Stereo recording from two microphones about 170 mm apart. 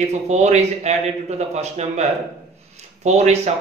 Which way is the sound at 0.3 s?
40° right (ahead or behind).